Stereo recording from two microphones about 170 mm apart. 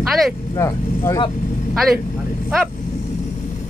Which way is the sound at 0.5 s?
15° left (ahead or behind).